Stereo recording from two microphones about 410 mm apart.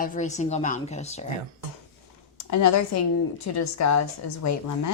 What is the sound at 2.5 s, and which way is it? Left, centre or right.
A woman's voice, left.